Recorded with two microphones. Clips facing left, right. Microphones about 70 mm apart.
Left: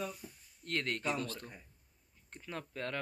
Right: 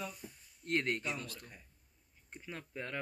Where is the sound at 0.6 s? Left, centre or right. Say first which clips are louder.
Right 3 dB; centre.